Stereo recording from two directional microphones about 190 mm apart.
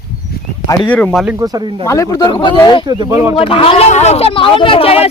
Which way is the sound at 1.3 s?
20° right (ahead or behind).